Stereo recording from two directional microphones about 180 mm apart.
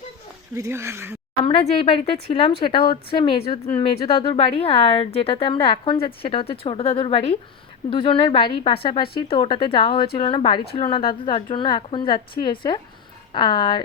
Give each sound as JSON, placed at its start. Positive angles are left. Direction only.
{"t": 0.5, "sound": "speech", "side_deg": -15}
{"t": 1.5, "sound": "a woman's voice", "side_deg": 30}